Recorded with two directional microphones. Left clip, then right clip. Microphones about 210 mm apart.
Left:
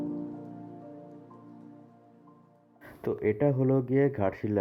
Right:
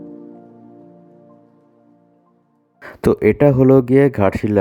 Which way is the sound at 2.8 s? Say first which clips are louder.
Right 15 dB; 60° right (ahead or behind).